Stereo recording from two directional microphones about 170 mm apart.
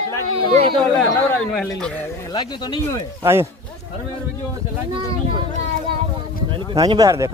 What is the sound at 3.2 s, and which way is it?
Speech, 15° right (ahead or behind).